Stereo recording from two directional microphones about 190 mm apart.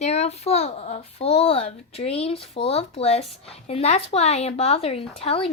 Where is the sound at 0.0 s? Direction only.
35° left (ahead or behind).